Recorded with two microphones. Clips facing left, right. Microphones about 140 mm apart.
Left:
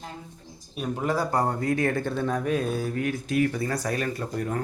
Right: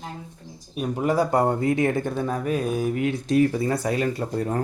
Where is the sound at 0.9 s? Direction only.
10° right (ahead or behind).